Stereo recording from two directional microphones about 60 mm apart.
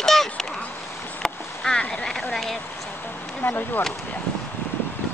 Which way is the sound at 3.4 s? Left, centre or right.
Left.